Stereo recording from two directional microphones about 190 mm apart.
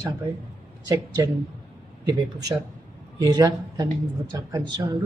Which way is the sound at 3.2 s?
20° right (ahead or behind).